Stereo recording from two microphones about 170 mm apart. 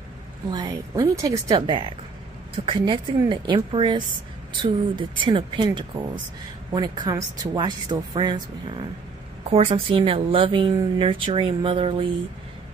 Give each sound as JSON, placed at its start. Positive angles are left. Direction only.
{"t": 0.5, "sound": "speech", "side_deg": -25}
{"t": 6.7, "sound": "speech", "side_deg": -25}